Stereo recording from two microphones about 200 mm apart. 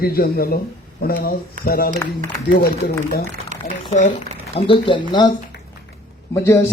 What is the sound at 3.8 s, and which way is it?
Speech, 35° left (ahead or behind).